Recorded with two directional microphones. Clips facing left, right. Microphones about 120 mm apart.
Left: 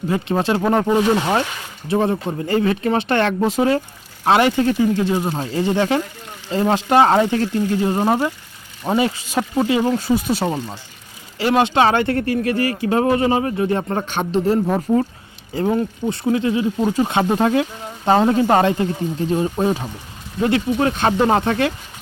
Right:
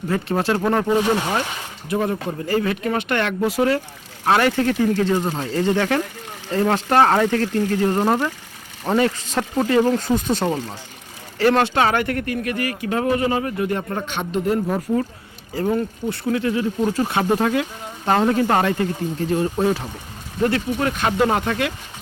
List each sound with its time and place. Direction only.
0.1 s speech: 20° left (ahead or behind)
1.9 s speech: 25° left (ahead or behind)